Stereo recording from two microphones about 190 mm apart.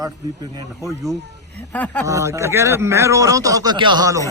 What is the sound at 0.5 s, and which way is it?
Speech, 15° right (ahead or behind).